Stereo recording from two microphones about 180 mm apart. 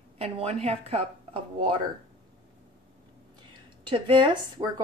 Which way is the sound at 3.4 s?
25° right (ahead or behind).